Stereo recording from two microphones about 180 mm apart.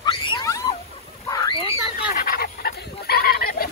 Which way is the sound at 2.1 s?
55° left (ahead or behind).